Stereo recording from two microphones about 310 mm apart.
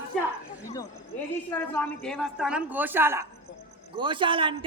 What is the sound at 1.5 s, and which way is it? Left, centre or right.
A man's voice, centre.